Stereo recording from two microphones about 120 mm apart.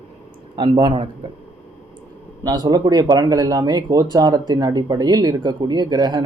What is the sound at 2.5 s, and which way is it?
Speech, 35° right (ahead or behind).